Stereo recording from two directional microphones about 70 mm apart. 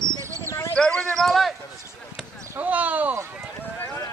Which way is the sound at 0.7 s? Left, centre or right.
Centre.